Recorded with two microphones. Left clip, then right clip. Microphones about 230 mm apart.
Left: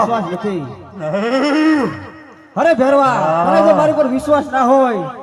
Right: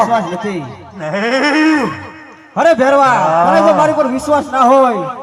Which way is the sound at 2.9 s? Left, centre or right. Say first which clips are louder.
Right 3 dB; right.